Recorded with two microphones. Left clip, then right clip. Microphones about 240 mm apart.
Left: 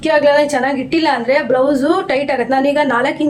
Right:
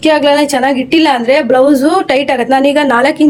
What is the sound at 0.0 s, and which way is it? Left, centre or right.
A woman's voice, right.